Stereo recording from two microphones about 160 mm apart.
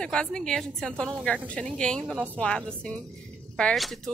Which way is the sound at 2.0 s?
10° right (ahead or behind).